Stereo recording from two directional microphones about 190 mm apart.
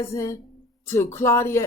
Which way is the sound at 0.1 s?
15° left (ahead or behind).